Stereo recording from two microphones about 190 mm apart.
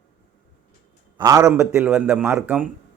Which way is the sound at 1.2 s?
20° right (ahead or behind).